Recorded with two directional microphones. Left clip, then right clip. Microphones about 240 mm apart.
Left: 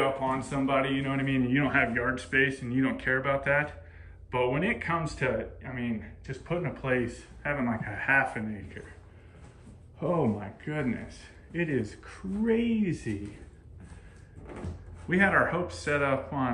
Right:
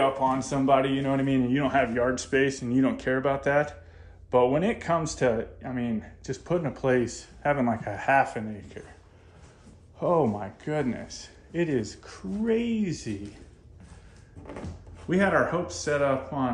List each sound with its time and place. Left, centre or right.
0.2 s a man's voice: centre
9.9 s a man's voice: centre
15.0 s a man's voice: centre